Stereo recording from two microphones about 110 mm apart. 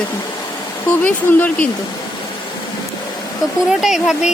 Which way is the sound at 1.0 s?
15° left (ahead or behind).